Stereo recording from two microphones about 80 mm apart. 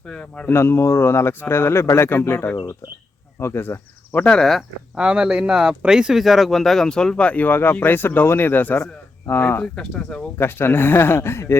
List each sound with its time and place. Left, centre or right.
0.0 s speech: centre
0.4 s speech: left
4.2 s speech: centre
4.9 s speech: centre; by 8.8 s left
8.8 s a man's voice: left
9.4 s speech: left
9.7 s speech: centre
10.3 s speech: left